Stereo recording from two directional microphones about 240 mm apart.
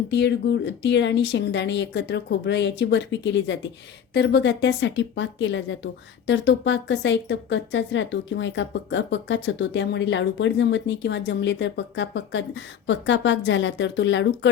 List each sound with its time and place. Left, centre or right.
0.1 s a woman's voice: left